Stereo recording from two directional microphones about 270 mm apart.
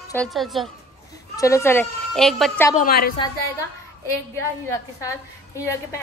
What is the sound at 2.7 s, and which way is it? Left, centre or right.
Speech, left.